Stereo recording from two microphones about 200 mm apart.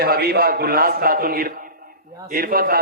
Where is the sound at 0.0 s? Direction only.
50° right (ahead or behind).